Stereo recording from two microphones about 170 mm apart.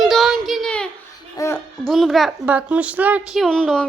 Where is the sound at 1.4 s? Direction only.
20° left (ahead or behind).